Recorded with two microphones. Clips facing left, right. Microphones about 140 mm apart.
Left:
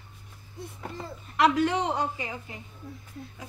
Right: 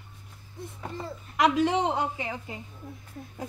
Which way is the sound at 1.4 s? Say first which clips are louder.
Even; 20° right (ahead or behind).